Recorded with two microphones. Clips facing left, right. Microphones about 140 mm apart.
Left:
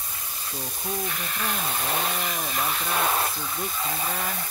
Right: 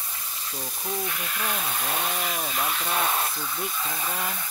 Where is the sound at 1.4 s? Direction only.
Centre (ahead or behind).